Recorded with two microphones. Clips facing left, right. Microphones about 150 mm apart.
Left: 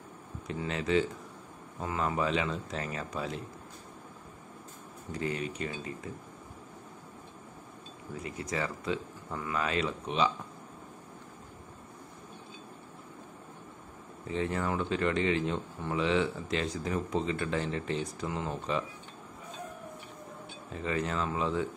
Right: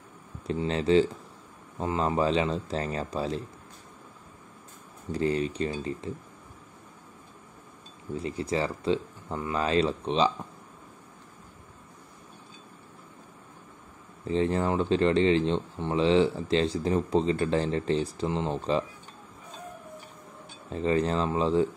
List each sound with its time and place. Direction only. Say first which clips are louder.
0.5 s speech: right 6 dB; 30° right (ahead or behind)
5.1 s speech: right 7 dB; 35° right (ahead or behind)
8.1 s speech: right 7 dB; 30° right (ahead or behind)
14.2 s speech: right 6 dB; 30° right (ahead or behind)
20.7 s speech: right 7 dB; 30° right (ahead or behind)